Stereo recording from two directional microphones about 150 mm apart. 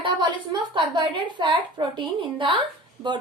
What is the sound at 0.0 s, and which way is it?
A woman's voice, 30° right (ahead or behind).